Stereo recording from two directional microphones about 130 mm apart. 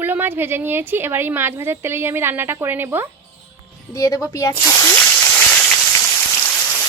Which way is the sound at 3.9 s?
25° left (ahead or behind).